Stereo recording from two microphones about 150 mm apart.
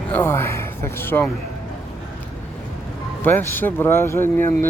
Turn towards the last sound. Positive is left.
turn(degrees=15)  # may be behind; listen again after turning